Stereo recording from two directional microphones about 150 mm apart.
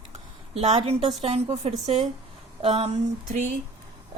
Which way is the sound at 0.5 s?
50° right (ahead or behind).